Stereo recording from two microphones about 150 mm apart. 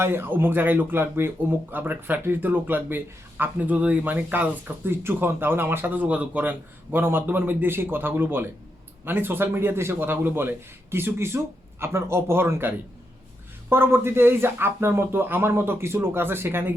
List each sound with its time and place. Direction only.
0.0 s a man's voice: 15° right (ahead or behind)